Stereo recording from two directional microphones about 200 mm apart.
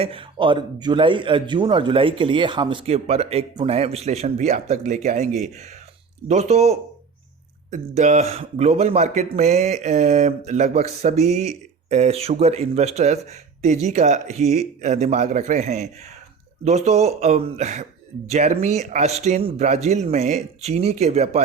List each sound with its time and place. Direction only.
0.0 s a man's voice: 25° right (ahead or behind)